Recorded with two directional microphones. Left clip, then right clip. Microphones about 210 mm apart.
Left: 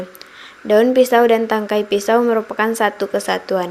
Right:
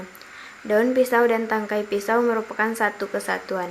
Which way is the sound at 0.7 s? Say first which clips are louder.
Left 7 dB; 25° left (ahead or behind).